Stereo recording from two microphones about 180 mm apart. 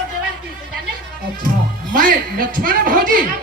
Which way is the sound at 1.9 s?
50° right (ahead or behind).